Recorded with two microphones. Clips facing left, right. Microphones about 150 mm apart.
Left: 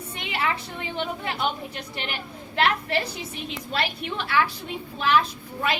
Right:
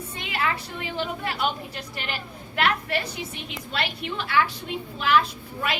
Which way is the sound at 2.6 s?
30° left (ahead or behind).